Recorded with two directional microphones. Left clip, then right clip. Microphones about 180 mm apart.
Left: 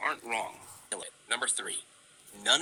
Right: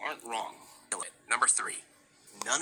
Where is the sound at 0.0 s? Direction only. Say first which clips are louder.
Left 3 dB; 15° left (ahead or behind).